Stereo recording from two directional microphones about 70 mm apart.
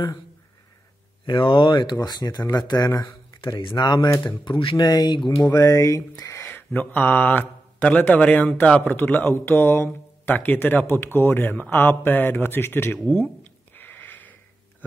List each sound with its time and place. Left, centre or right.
1.2 s speech: left
3.4 s speech: left
5.5 s speech: left
6.7 s speech: left
13.1 s a sound: left